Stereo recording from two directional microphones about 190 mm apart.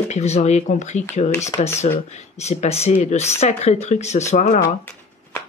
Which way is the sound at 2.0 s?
35° left (ahead or behind).